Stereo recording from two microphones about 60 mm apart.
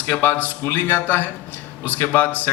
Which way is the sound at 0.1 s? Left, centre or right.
Left.